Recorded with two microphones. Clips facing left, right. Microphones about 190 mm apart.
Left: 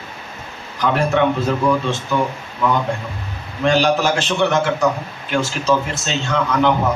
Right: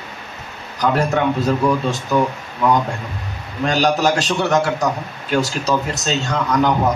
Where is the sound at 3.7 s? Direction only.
40° right (ahead or behind).